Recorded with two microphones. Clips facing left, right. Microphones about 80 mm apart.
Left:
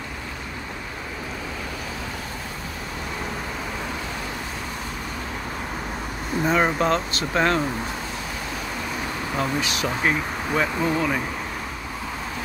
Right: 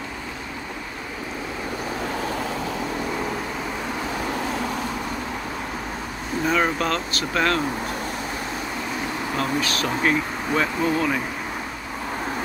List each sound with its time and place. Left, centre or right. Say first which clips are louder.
6.4 s speech: left 1 dB; centre
9.4 s speech: even; centre